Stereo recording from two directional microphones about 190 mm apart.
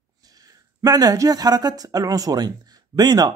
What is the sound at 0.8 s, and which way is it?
Speech, 20° right (ahead or behind).